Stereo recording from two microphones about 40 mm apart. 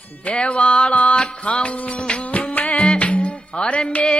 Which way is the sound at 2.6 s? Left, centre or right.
Centre.